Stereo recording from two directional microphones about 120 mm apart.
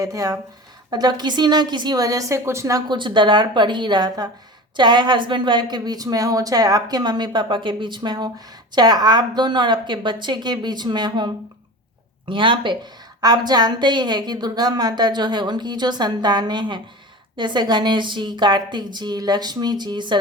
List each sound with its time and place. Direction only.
0.0 s a woman's voice: 30° right (ahead or behind)
2.9 s a woman's voice: 40° right (ahead or behind)
12.3 s a woman's voice: 45° right (ahead or behind)